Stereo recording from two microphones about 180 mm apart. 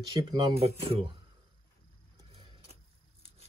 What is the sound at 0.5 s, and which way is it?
Speech, 35° right (ahead or behind).